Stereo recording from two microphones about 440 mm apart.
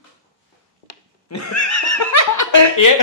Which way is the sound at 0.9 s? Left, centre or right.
Left.